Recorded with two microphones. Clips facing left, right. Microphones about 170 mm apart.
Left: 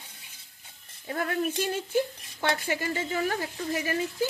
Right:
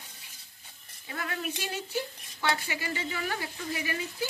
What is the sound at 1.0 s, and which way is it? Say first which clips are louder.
Speech: left 7 dB; 45° left (ahead or behind).